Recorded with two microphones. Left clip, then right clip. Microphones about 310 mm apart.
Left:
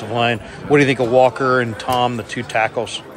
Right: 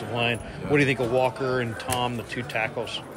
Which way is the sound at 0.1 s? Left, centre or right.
Centre.